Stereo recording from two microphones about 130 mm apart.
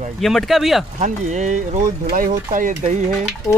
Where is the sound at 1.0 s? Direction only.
65° right (ahead or behind); by 2.4 s 90° right.